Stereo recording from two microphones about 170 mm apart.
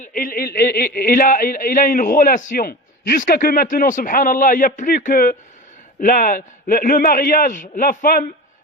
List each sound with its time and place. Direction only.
0.0 s a man's voice: 55° left (ahead or behind)